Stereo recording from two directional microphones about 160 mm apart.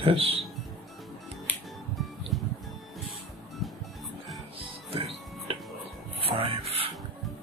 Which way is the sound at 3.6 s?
Centre (ahead or behind).